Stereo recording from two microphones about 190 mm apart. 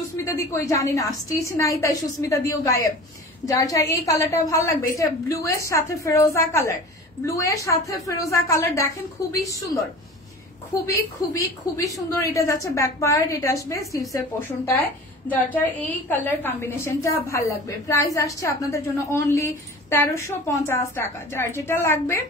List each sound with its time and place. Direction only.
0.2 s a woman's voice: 15° left (ahead or behind)
10.9 s a woman's voice: 15° left (ahead or behind)